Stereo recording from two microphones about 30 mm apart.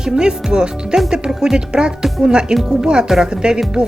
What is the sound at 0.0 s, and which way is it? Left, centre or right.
Speech, right.